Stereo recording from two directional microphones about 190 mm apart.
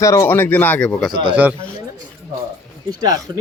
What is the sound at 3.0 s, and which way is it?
Speech, 20° right (ahead or behind).